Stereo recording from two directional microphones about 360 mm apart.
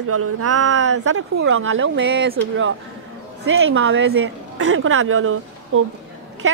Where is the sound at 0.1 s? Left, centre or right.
Right.